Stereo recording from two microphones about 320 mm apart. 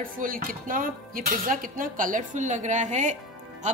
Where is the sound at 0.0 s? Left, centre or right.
Right.